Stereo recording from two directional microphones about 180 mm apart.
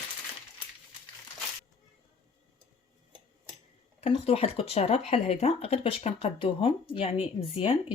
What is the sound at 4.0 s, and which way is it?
Speech, 35° left (ahead or behind).